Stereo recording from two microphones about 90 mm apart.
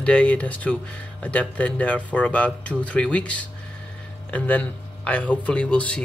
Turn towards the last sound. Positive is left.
turn(degrees=10)  # may be behind; listen again after turning